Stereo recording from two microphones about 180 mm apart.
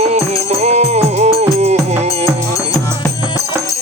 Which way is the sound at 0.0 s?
35° right (ahead or behind).